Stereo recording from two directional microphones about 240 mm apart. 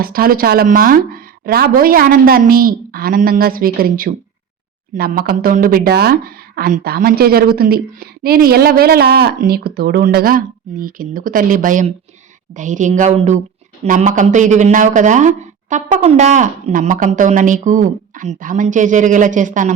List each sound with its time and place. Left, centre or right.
0.0 s speech: right